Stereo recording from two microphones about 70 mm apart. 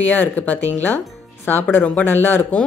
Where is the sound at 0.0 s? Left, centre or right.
Left.